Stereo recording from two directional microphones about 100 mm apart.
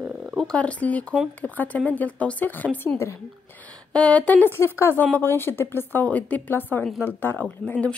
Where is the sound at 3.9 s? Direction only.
10° left (ahead or behind).